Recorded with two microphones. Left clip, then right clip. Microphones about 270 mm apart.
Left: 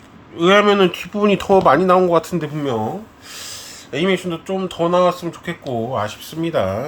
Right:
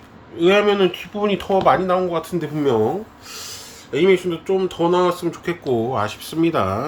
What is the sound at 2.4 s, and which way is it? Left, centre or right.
Speech, centre.